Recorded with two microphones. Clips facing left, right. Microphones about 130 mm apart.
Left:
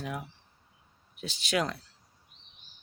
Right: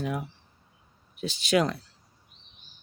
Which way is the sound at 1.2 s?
15° right (ahead or behind).